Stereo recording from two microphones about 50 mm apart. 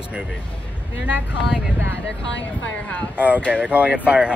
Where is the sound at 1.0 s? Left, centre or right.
Right.